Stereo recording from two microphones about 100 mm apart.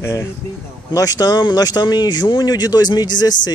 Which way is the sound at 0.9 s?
40° left (ahead or behind).